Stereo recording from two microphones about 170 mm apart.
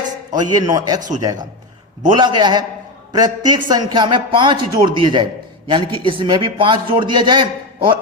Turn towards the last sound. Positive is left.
turn(degrees=-30)  # may be behind; listen again after turning